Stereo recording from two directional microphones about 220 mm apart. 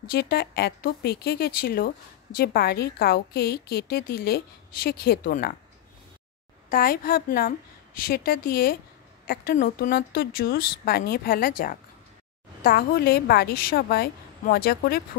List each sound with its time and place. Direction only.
0.0 s a woman's voice: 45° left (ahead or behind)
6.7 s a woman's voice: 40° left (ahead or behind)